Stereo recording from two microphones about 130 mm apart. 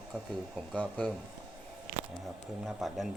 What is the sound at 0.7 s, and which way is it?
Speech, 10° left (ahead or behind).